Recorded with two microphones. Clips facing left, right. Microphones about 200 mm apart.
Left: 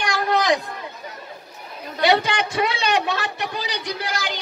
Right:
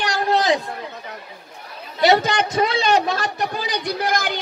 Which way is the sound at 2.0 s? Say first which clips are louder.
Right 3 dB; 45° right (ahead or behind).